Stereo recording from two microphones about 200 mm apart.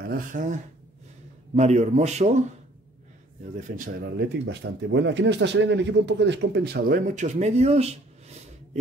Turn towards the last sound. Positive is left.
turn(degrees=-30)  # may be behind; listen again after turning